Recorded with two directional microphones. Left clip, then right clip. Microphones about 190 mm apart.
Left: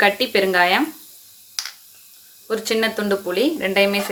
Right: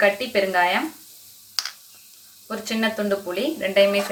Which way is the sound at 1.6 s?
10° right (ahead or behind).